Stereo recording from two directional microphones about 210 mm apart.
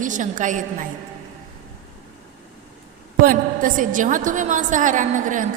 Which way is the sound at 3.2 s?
40° right (ahead or behind).